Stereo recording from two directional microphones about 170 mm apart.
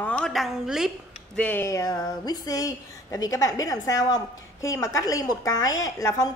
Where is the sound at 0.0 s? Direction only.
5° left (ahead or behind).